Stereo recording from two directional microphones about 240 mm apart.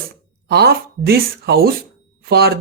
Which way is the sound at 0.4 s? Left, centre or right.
Right.